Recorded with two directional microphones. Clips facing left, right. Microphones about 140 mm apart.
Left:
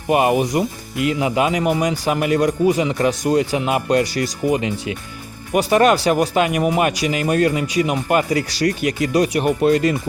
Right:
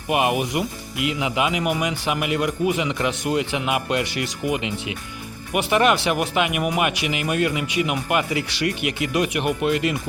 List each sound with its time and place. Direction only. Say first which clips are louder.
0.1 s speech: left 5 dB; 40° left (ahead or behind)